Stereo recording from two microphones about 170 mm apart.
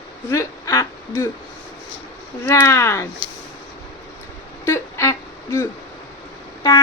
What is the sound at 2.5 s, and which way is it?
Speech, 15° left (ahead or behind).